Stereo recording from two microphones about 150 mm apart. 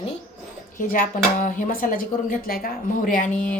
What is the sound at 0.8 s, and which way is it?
A woman's voice, 65° left (ahead or behind).